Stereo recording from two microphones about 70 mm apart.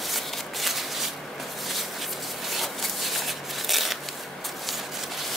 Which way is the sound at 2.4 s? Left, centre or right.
Centre.